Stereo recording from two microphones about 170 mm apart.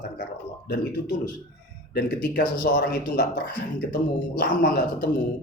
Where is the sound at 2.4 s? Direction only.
55° left (ahead or behind).